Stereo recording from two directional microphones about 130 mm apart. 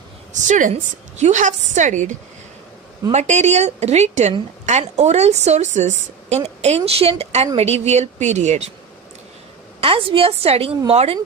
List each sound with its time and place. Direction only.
0.3 s a woman's voice: 75° right (ahead or behind)
9.8 s a woman's voice: 45° right (ahead or behind)